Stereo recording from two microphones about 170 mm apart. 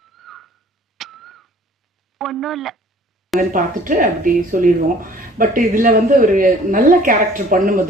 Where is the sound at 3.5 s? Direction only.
50° right (ahead or behind).